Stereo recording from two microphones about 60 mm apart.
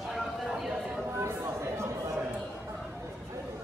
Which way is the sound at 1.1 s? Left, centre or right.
Right.